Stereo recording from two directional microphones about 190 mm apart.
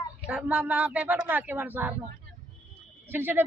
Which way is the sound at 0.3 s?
5° right (ahead or behind).